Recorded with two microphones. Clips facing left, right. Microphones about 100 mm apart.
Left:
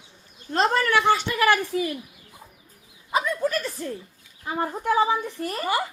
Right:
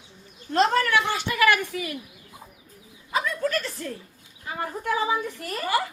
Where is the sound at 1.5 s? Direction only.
30° left (ahead or behind).